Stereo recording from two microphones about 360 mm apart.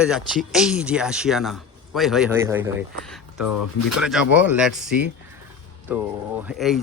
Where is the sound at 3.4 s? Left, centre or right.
Left.